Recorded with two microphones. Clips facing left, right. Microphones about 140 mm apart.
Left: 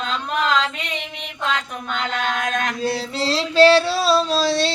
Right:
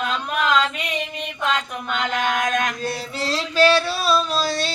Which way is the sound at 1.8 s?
10° right (ahead or behind).